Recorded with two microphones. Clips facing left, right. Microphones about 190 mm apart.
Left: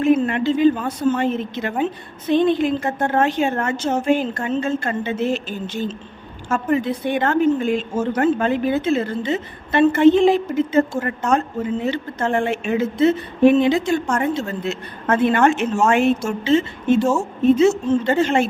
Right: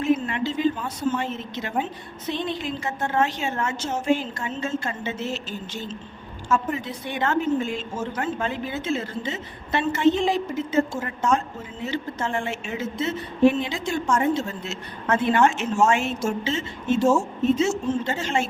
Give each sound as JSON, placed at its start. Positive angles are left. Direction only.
{"t": 0.0, "sound": "a woman's voice", "side_deg": 55}
{"t": 17.0, "sound": "a woman's voice", "side_deg": 0}
{"t": 17.4, "sound": "a woman's voice", "side_deg": 60}